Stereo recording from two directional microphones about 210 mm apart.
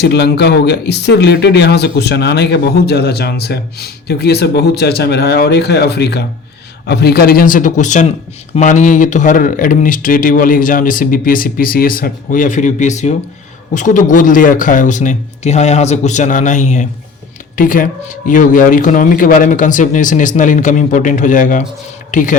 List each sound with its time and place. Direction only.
0.0 s speech: 50° left (ahead or behind)